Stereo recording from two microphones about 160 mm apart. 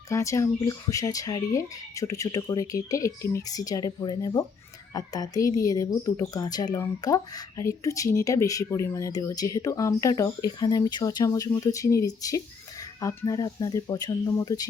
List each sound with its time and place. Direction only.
0.1 s speech: 20° left (ahead or behind)